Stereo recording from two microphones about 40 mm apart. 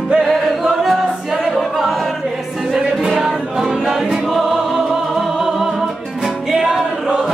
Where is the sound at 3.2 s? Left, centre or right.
Centre.